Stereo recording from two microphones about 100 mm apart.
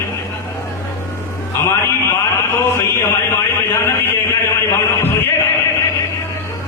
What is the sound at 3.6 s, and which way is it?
Chant, 25° left (ahead or behind).